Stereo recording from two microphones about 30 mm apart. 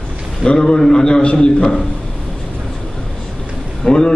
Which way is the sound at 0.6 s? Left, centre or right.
Centre.